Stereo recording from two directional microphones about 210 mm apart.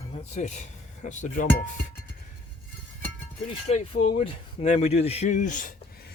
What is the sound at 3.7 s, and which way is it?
A man's voice, 30° left (ahead or behind).